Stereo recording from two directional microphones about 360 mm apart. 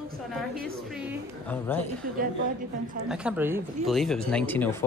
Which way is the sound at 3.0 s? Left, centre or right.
Centre.